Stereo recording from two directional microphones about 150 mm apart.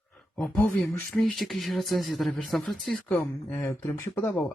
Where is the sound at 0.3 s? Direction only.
10° left (ahead or behind).